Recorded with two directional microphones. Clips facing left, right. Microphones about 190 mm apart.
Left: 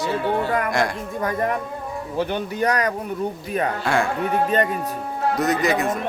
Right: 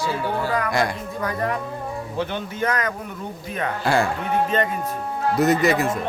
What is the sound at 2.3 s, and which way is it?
Speech, 35° left (ahead or behind).